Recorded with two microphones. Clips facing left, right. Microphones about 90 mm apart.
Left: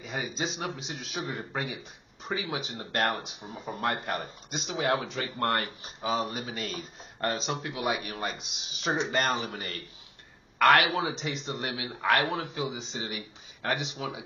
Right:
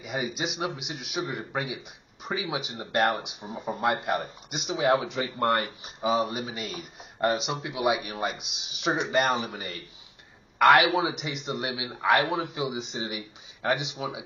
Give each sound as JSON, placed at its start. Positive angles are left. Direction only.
{"t": 0.0, "sound": "a man's voice", "side_deg": -15}
{"t": 10.6, "sound": "speech", "side_deg": -20}